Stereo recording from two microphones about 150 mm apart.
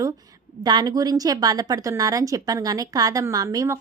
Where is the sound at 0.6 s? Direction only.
25° right (ahead or behind).